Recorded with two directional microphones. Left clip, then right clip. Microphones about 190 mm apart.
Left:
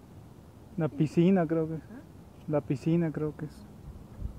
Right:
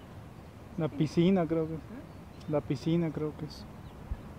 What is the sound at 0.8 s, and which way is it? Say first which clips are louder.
Speech: left 2 dB; 30° left (ahead or behind).